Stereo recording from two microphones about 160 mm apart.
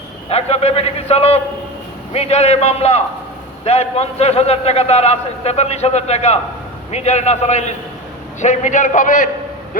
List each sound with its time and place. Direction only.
0.3 s a man's voice: 40° left (ahead or behind)